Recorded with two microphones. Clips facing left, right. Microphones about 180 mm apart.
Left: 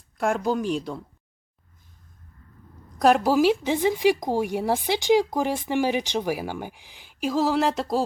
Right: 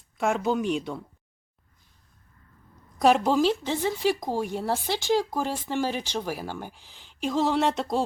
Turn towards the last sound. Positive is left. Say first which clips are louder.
# left 2 dB
turn(degrees=0)  # may be behind; listen again after turning